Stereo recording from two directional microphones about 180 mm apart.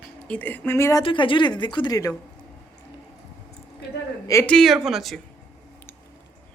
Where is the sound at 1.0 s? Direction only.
25° left (ahead or behind).